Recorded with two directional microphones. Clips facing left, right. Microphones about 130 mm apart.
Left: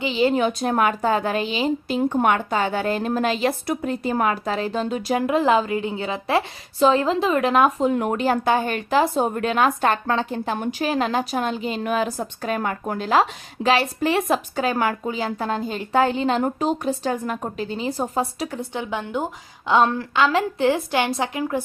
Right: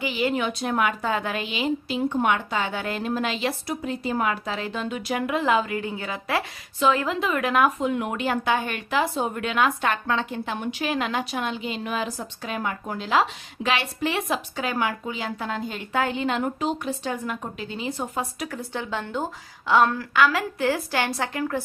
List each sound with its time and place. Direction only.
0.0 s speech: 25° left (ahead or behind); by 3.5 s 45° left (ahead or behind)
3.7 s speech: 55° left (ahead or behind); by 21.6 s 20° left (ahead or behind)